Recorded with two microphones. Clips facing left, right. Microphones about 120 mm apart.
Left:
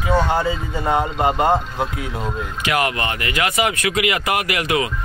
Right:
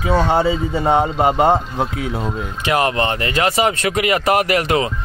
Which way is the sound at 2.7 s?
25° right (ahead or behind).